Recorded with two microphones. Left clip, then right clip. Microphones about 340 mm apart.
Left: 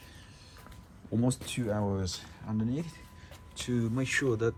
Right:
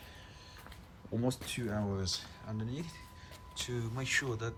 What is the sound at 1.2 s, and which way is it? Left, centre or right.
Speech, centre.